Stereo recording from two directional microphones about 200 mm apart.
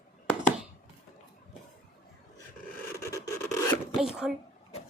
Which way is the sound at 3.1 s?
15° left (ahead or behind).